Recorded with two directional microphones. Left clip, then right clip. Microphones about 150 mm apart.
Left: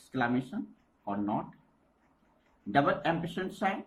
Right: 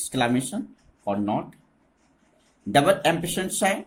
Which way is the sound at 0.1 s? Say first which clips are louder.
Right 7 dB; 55° right (ahead or behind).